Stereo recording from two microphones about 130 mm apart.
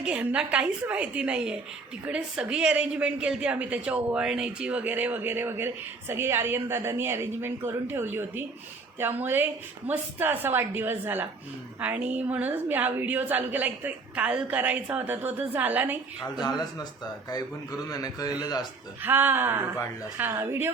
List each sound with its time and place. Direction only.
0.0 s a woman's voice: 10° right (ahead or behind)
16.2 s a man's voice: 30° left (ahead or behind)
19.0 s a woman's voice: 15° right (ahead or behind)